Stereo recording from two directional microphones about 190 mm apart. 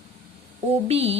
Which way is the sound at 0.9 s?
30° right (ahead or behind).